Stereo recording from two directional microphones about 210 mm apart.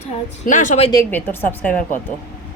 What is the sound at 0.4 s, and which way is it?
Speech, 35° left (ahead or behind).